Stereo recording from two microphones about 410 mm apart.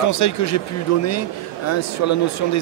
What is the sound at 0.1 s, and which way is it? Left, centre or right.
Speech, left.